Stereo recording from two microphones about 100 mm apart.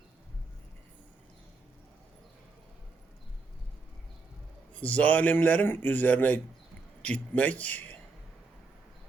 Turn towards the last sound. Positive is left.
turn(degrees=15)  # may be behind; listen again after turning